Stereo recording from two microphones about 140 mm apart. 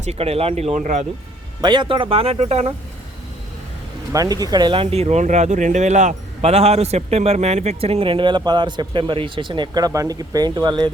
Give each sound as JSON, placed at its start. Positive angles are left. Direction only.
{"t": 0.0, "sound": "speech", "side_deg": -50}
{"t": 1.6, "sound": "speech", "side_deg": -35}
{"t": 4.1, "sound": "speech", "side_deg": -25}